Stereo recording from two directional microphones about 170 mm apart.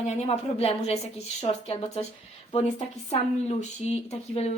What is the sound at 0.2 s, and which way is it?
Speech, 35° left (ahead or behind).